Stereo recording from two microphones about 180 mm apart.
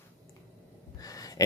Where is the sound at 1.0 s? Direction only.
20° left (ahead or behind).